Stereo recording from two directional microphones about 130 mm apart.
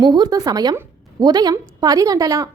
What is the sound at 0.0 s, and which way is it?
A woman's voice, 35° right (ahead or behind).